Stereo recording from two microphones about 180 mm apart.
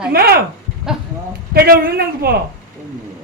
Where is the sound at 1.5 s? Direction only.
60° right (ahead or behind).